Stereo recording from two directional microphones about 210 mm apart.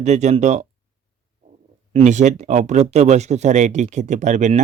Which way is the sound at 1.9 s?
35° right (ahead or behind).